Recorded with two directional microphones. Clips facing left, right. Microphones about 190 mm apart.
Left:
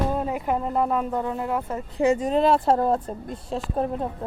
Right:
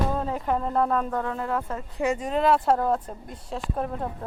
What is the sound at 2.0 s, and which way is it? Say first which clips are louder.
Speech: left 5 dB; 30° left (ahead or behind).